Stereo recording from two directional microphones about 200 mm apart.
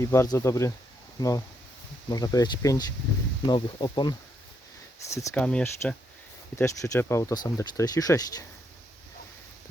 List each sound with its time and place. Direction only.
0.0 s speech: 15° left (ahead or behind)
2.0 s speech: 20° left (ahead or behind)
5.0 s speech: 10° left (ahead or behind)